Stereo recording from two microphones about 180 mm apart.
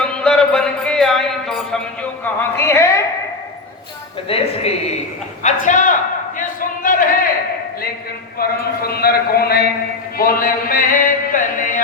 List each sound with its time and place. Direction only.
0.0 s music: 5° left (ahead or behind)
4.3 s a woman's voice: 35° left (ahead or behind)
5.4 s a sound: 45° left (ahead or behind)
8.4 s speech: 60° left (ahead or behind)
10.2 s music: 55° left (ahead or behind)